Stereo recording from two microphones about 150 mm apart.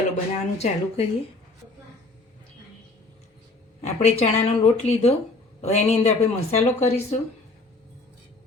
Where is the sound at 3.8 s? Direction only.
45° left (ahead or behind).